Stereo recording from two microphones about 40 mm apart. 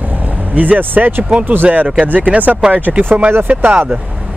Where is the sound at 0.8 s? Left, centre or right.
Right.